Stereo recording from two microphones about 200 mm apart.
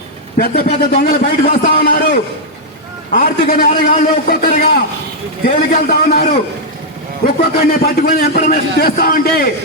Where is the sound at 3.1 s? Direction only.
45° left (ahead or behind).